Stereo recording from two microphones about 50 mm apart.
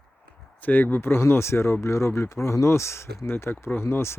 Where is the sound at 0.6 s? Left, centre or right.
Left.